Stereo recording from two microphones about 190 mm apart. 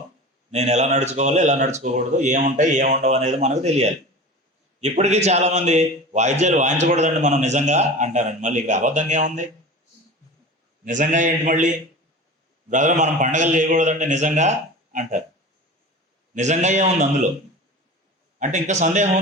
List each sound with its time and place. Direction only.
0.5 s a man's voice: 35° right (ahead or behind)
10.8 s a man's voice: 40° right (ahead or behind)
12.7 s a man's voice: 40° right (ahead or behind)
16.3 s a man's voice: 40° right (ahead or behind)
18.3 s a man's voice: 40° right (ahead or behind)